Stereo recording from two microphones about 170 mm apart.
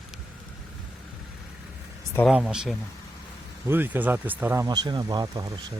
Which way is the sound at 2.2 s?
5° right (ahead or behind).